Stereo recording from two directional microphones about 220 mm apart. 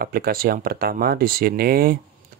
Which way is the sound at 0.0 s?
45° right (ahead or behind).